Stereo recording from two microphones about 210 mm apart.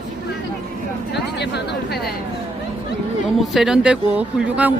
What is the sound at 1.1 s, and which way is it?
Speech, 55° left (ahead or behind).